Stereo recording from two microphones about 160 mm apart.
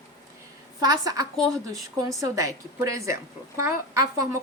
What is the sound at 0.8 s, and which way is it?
A woman's voice, 25° right (ahead or behind).